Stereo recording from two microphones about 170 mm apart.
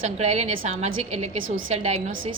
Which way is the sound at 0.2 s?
40° right (ahead or behind).